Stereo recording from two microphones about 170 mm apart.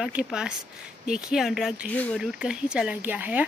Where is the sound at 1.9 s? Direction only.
10° left (ahead or behind).